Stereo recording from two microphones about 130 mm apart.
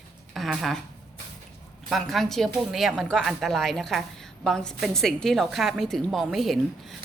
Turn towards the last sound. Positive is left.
turn(degrees=0)  # may be behind; listen again after turning